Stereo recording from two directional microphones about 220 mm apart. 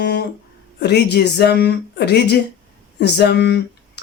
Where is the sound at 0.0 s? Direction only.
50° left (ahead or behind).